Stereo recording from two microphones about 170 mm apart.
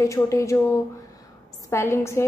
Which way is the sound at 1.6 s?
15° left (ahead or behind).